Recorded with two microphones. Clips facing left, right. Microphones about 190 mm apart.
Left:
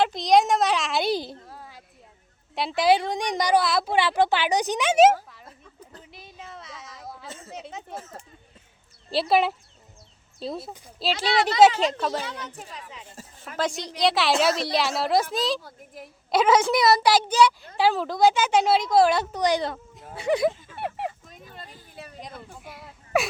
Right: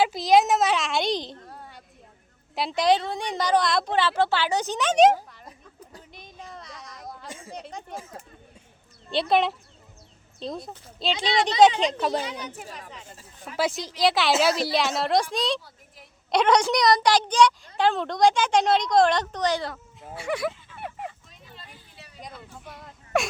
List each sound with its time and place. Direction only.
0.0 s a woman's voice: 5° right (ahead or behind)
3.0 s a woman's voice: 15° left (ahead or behind)
6.0 s a sound: 5° left (ahead or behind)
7.3 s speech: 10° right (ahead or behind)
7.5 s a woman's voice: 5° left (ahead or behind)
7.9 s speech: 10° right (ahead or behind)
9.0 s a woman's voice: 5° left (ahead or behind)
11.9 s speech: 20° right (ahead or behind)
13.6 s a woman's voice: centre (ahead or behind); by 20.5 s 25° left (ahead or behind)
20.8 s a sound: 80° left
21.2 s a sound: 50° left (ahead or behind)
22.6 s whimper: 5° left (ahead or behind)